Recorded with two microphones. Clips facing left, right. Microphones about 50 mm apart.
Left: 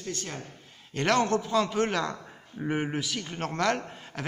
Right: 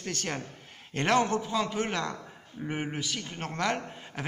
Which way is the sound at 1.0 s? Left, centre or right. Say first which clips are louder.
Left 1 dB; centre.